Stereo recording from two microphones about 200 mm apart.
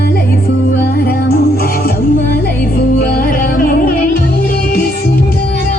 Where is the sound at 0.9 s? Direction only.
50° left (ahead or behind).